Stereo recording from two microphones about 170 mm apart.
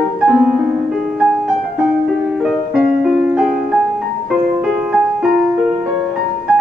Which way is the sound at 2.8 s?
5° right (ahead or behind).